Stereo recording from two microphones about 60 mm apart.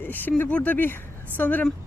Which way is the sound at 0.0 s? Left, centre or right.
Left.